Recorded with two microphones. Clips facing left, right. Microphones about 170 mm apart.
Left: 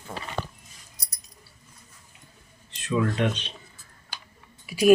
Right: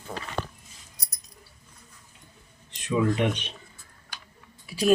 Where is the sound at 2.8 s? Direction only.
10° right (ahead or behind).